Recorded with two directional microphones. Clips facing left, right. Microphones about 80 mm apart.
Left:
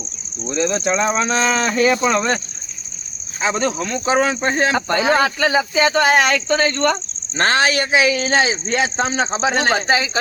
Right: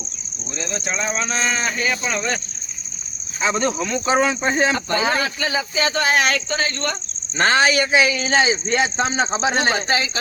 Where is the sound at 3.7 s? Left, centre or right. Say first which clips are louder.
Left 1 dB; centre.